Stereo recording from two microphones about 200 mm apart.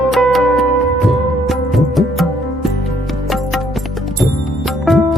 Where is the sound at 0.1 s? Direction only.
Centre (ahead or behind).